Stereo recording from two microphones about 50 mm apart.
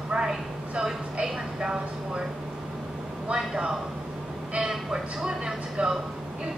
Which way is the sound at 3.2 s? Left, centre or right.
Centre.